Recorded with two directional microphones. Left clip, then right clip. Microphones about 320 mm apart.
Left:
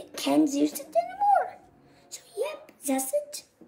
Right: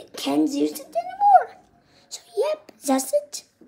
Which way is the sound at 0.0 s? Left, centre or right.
Centre.